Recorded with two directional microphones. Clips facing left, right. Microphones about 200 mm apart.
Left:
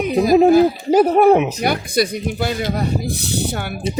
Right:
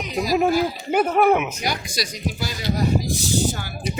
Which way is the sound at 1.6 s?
60° left (ahead or behind).